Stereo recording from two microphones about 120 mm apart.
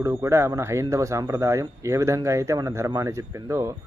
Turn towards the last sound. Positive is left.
turn(degrees=-25)  # may be behind; listen again after turning